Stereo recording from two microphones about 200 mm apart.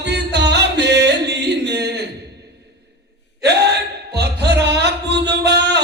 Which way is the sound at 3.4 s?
55° right (ahead or behind).